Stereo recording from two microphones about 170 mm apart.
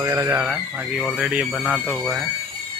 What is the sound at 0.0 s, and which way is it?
Speech, 20° right (ahead or behind).